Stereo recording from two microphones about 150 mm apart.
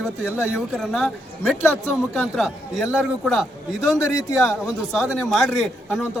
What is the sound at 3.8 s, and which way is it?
Speech, 20° left (ahead or behind).